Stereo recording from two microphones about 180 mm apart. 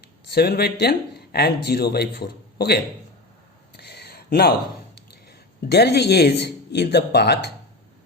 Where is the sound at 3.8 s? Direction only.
65° left (ahead or behind).